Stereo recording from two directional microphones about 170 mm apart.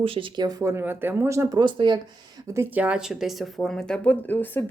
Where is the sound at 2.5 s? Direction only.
10° right (ahead or behind); by 4.6 s 10° left (ahead or behind).